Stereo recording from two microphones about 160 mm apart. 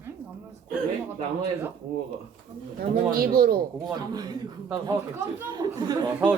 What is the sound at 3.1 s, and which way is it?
Speech, 65° right (ahead or behind).